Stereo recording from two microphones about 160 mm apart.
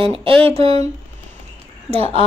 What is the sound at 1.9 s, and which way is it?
Speech, 35° right (ahead or behind).